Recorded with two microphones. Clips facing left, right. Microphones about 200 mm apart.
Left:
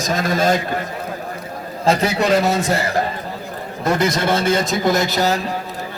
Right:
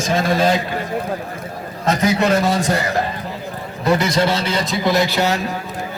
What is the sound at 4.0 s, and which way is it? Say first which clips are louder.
A man's voice: even; 50° left (ahead or behind).